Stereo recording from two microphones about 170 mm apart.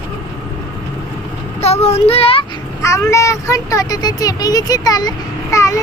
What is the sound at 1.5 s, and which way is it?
A child's voice, 40° left (ahead or behind).